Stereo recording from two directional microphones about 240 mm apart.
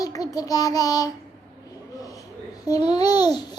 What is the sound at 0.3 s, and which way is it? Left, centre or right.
Speech, centre.